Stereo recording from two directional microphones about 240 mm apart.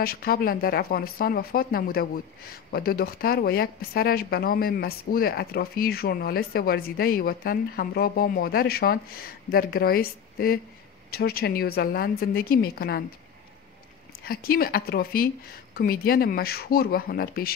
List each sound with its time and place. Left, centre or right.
0.0 s speech: left
14.2 s speech: left